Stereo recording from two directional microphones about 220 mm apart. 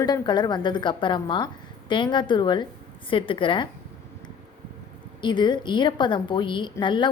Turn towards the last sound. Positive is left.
turn(degrees=20)  # may be behind; listen again after turning